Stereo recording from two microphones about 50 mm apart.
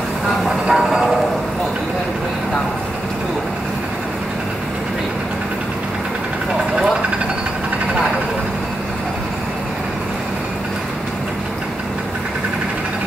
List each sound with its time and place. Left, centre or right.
0.7 s train: centre